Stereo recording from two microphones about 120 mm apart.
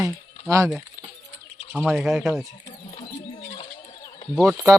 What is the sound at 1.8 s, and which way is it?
Speech, centre (ahead or behind).